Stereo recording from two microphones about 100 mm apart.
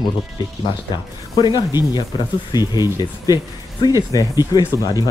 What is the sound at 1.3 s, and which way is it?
Speech, 50° left (ahead or behind).